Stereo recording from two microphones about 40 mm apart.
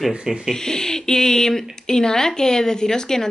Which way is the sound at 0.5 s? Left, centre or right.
Centre.